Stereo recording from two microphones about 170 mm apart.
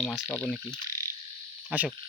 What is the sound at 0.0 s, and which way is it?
Speech, centre (ahead or behind).